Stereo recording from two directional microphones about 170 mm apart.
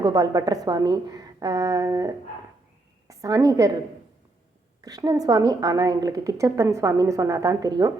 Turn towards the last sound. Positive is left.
turn(degrees=-20)  # may be behind; listen again after turning